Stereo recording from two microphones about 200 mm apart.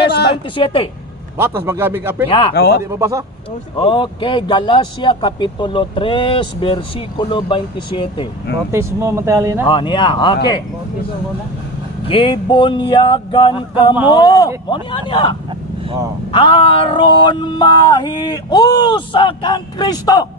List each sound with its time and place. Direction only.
0.6 s speech: 30° left (ahead or behind)
1.4 s speech: 10° right (ahead or behind)
2.2 s speech: 25° left (ahead or behind)
2.5 s speech: 55° left (ahead or behind)
2.9 s speech: 15° right (ahead or behind)
3.7 s speech: 25° left (ahead or behind)
8.7 s speech: 15° right (ahead or behind)
9.7 s speech: 25° left (ahead or behind)
12.1 s speech: 25° left (ahead or behind)